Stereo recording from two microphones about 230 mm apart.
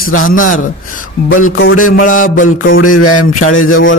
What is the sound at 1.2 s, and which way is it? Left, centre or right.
Speech, left.